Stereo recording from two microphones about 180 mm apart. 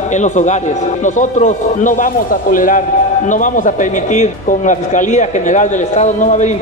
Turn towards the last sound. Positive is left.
turn(degrees=40)  # may be behind; listen again after turning